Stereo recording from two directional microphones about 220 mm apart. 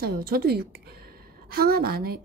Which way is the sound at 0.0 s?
45° right (ahead or behind).